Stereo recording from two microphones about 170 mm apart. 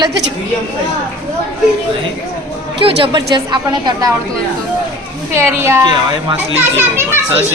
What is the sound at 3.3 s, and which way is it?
Speech, 25° right (ahead or behind).